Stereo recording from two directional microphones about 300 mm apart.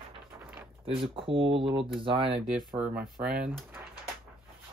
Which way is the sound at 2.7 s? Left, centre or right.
Centre.